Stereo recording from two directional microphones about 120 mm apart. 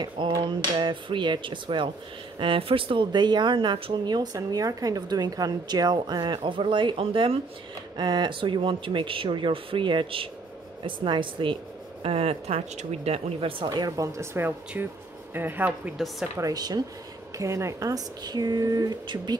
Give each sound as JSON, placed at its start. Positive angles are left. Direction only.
{"t": 0.0, "sound": "speech", "side_deg": -35}
{"t": 8.0, "sound": "speech", "side_deg": -40}
{"t": 12.0, "sound": "speech", "side_deg": -55}
{"t": 13.7, "sound": "speech", "side_deg": -30}
{"t": 16.3, "sound": "speech", "side_deg": -30}